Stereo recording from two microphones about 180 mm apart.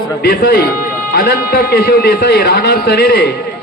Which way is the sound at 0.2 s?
55° left (ahead or behind).